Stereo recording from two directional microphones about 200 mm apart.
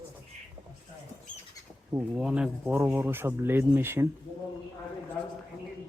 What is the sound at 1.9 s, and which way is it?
Speech, 5° right (ahead or behind).